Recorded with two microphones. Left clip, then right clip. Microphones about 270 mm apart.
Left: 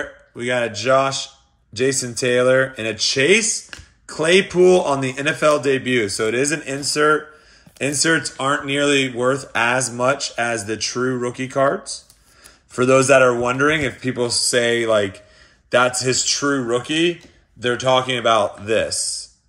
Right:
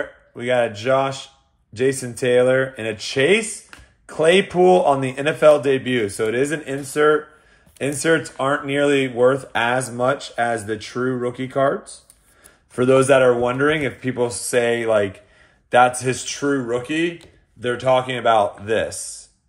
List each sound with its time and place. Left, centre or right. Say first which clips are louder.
0.4 s speech: right 1 dB; centre
3.7 s a sound: left 6 dB; left
4.1 s speech: even; centre